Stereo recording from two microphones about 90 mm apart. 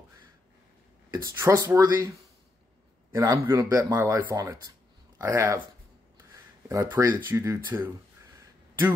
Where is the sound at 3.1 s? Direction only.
35° right (ahead or behind).